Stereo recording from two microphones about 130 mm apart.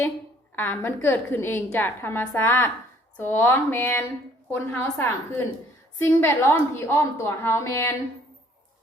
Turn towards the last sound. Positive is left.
turn(degrees=20)  # may be behind; listen again after turning